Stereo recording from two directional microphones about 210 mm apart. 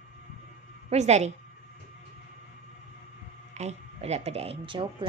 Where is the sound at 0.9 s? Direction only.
30° right (ahead or behind).